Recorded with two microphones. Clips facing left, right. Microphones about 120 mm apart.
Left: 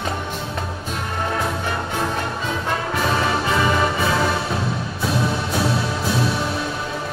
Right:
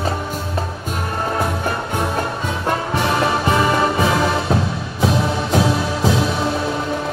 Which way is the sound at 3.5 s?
20° right (ahead or behind).